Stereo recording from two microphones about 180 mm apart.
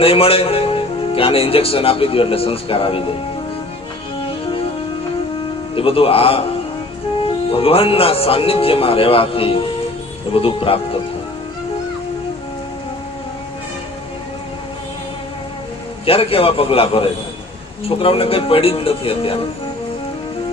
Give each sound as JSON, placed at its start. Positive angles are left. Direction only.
{"t": 0.0, "sound": "a man's voice", "side_deg": 30}
{"t": 5.7, "sound": "a man's voice", "side_deg": 30}
{"t": 16.0, "sound": "a man's voice", "side_deg": 30}